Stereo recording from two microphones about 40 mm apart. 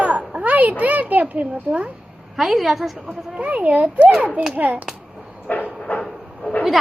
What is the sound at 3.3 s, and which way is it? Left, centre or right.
A child's voice, right.